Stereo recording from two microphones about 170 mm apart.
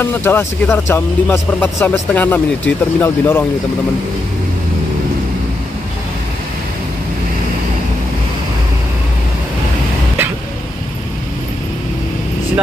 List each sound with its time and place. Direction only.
0.0 s speech: 15° left (ahead or behind)